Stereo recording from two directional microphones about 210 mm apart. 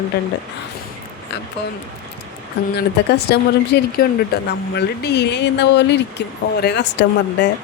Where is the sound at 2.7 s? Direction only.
50° left (ahead or behind).